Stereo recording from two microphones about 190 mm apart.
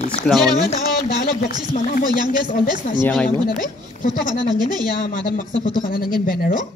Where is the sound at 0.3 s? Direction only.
5° left (ahead or behind).